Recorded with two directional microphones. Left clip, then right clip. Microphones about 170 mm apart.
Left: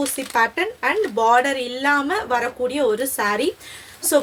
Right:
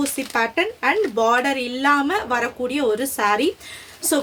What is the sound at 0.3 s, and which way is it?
Speech, 20° right (ahead or behind).